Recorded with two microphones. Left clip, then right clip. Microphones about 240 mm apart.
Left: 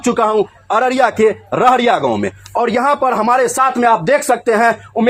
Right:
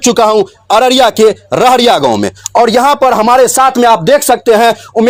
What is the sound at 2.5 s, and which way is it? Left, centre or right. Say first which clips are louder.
Speech: right 7 dB; right.